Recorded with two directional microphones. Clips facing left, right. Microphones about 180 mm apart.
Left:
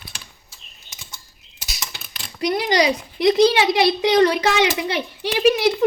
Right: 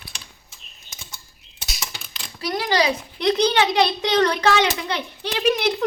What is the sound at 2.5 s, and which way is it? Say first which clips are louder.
A child's voice: left 1 dB; 15° left (ahead or behind).